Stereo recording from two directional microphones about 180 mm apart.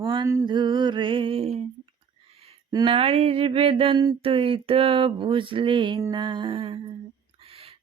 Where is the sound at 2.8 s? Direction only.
30° right (ahead or behind).